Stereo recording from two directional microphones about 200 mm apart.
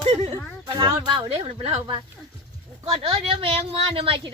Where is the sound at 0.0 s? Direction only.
25° right (ahead or behind).